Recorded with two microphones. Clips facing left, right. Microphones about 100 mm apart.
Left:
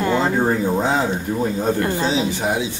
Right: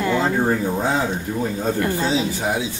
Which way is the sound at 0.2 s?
20° left (ahead or behind).